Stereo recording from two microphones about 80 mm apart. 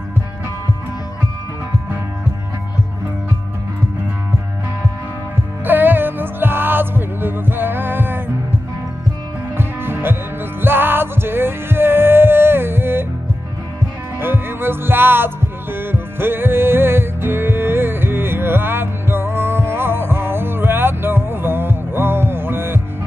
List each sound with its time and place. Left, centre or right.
5.7 s music: right
9.6 s music: right
14.2 s music: right